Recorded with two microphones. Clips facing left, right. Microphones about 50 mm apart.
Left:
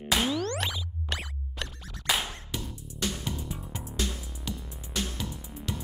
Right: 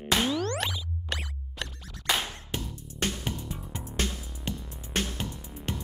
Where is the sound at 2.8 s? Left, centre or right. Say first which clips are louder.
Right 1 dB; right.